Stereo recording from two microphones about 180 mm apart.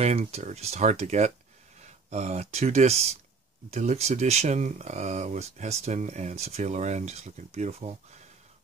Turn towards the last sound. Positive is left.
turn(degrees=-35)  # may be behind; listen again after turning